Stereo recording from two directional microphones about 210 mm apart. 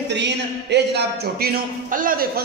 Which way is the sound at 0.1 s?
55° right (ahead or behind).